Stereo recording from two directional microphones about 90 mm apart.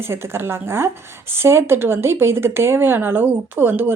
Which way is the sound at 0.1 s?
25° right (ahead or behind).